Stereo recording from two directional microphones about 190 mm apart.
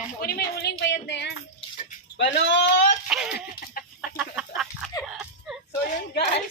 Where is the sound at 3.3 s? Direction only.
55° left (ahead or behind).